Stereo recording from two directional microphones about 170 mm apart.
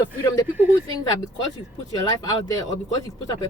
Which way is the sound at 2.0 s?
20° left (ahead or behind).